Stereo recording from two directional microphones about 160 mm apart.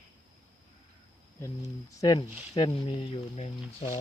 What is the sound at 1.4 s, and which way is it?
Speech, 20° left (ahead or behind).